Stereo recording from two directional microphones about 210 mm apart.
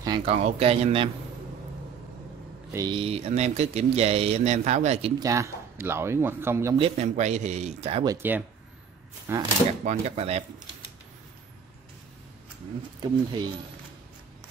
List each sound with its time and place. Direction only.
0.0 s speech: 25° right (ahead or behind)
2.7 s speech: 20° right (ahead or behind)
5.2 s a man's voice: 15° right (ahead or behind)
6.8 s speech: 35° right (ahead or behind)
8.0 s a man's voice: 15° right (ahead or behind)
9.7 s speech: 30° right (ahead or behind)
13.0 s speech: 20° right (ahead or behind)